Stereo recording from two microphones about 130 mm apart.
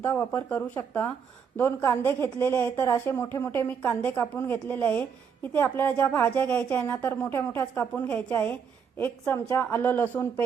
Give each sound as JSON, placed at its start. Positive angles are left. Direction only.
{"t": 0.0, "sound": "a woman's voice", "side_deg": 15}